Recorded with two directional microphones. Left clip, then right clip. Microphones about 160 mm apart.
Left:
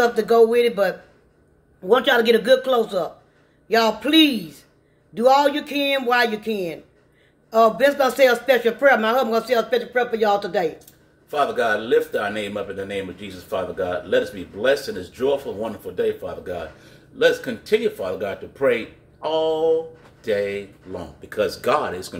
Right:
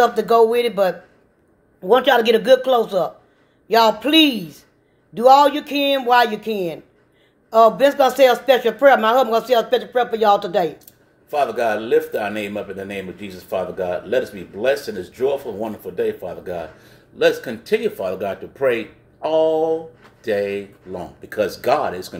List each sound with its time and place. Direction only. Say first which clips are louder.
0.0 s speech: right 2 dB; 20° right (ahead or behind)
11.2 s speech: right 1 dB; 10° right (ahead or behind)